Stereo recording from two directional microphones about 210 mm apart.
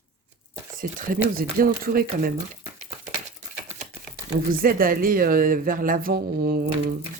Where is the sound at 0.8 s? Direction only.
45° right (ahead or behind).